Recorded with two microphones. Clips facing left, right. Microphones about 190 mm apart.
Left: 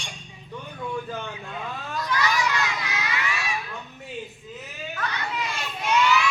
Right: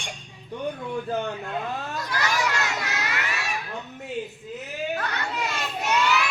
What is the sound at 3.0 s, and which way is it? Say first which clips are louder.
Baby cry: even; 45° right (ahead or behind).